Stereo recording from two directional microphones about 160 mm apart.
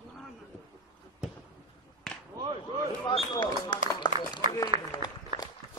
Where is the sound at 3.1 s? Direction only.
30° left (ahead or behind).